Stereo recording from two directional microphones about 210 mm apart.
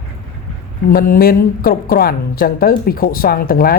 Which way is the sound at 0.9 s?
45° left (ahead or behind).